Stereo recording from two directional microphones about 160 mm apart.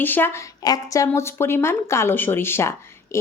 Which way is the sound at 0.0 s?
15° left (ahead or behind).